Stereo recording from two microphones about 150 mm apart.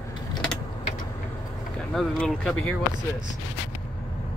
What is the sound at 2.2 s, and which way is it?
Speech, 5° left (ahead or behind).